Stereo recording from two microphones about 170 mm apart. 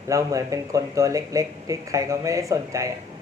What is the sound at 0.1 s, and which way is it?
Speech, 20° right (ahead or behind).